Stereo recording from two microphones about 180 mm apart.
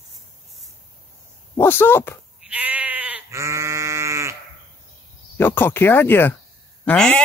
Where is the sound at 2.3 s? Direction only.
5° right (ahead or behind).